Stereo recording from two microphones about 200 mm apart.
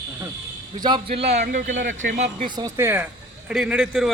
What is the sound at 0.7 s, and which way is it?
A man's voice, 20° right (ahead or behind).